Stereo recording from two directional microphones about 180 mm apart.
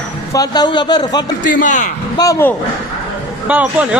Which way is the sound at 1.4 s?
45° left (ahead or behind).